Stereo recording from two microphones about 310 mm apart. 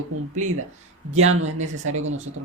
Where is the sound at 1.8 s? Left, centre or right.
Right.